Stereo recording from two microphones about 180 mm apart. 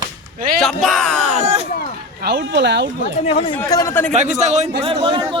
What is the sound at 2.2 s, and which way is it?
Speech, 70° right (ahead or behind).